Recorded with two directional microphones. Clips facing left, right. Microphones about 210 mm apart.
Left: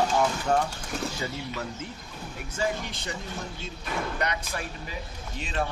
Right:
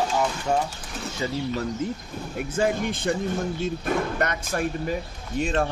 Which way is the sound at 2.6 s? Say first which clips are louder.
Right 6 dB; 50° right (ahead or behind).